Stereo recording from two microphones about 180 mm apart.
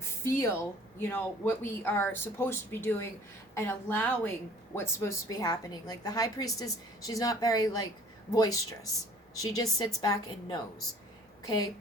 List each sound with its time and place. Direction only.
0.0 s a woman's voice: 15° left (ahead or behind)